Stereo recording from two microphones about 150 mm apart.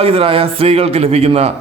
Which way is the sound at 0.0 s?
40° right (ahead or behind).